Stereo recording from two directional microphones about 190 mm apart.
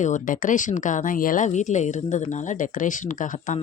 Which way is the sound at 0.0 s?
40° left (ahead or behind).